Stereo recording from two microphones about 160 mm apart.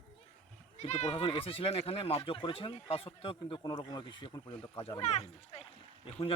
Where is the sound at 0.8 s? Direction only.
40° left (ahead or behind); by 4.5 s 25° left (ahead or behind).